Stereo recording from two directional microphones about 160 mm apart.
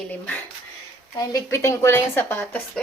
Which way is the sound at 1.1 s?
20° left (ahead or behind).